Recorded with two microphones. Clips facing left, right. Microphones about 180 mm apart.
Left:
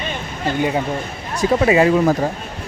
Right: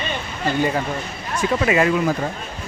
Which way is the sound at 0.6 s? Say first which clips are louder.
Left 2 dB; 15° left (ahead or behind).